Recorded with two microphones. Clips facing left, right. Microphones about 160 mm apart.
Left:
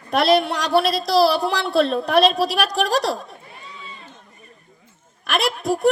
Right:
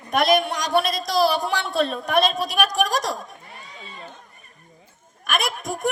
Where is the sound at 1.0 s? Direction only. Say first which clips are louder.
Left 4 dB; 30° left (ahead or behind).